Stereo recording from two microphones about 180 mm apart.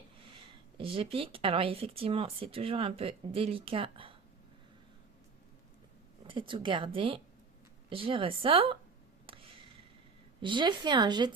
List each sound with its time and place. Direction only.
0.3 s speech: 30° right (ahead or behind)
6.2 s speech: 30° right (ahead or behind)
9.2 s a sound: 30° right (ahead or behind)
10.4 s speech: 25° right (ahead or behind)